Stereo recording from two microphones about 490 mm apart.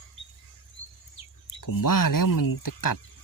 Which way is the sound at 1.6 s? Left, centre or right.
Left.